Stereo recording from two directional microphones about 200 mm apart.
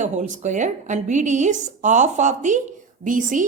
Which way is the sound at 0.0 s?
40° right (ahead or behind).